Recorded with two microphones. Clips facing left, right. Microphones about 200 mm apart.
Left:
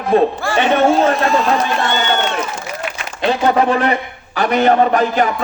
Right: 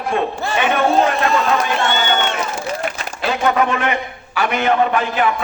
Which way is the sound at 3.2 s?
35° left (ahead or behind).